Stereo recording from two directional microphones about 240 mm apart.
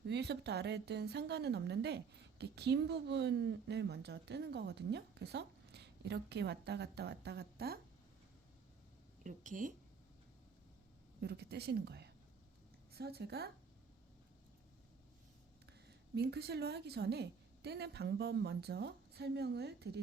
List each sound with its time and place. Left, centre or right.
0.0 s speech: right
9.2 s speech: right
11.2 s a woman's voice: right
15.9 s speech: right